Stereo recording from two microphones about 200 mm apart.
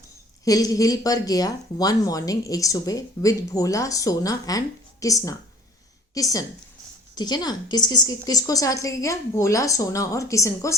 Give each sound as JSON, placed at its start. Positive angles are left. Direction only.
{"t": 0.4, "sound": "speech", "side_deg": 15}